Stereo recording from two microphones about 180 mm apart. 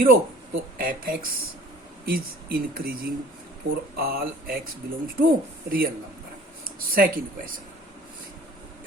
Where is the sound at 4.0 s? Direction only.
55° right (ahead or behind).